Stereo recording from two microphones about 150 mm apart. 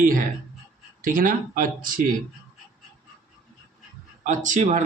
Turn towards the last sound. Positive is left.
turn(degrees=-55)  # may be behind; listen again after turning